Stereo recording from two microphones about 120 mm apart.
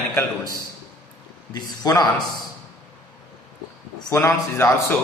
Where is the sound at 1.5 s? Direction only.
35° left (ahead or behind).